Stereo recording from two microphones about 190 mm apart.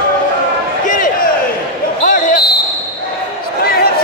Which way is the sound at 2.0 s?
45° left (ahead or behind).